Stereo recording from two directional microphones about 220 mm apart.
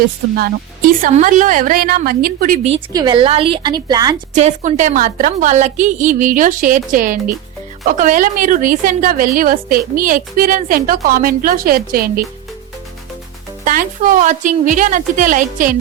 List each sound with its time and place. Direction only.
0.3 s a woman's voice: 40° right (ahead or behind)
2.6 s a woman's voice: 20° right (ahead or behind)
4.4 s a woman's voice: 35° right (ahead or behind)
13.7 s a woman's voice: 40° right (ahead or behind)